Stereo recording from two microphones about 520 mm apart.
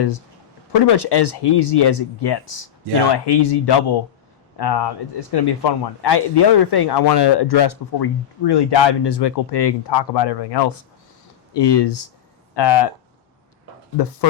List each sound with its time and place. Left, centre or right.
0.7 s speech: left
2.8 s speech: right
3.2 s speech: left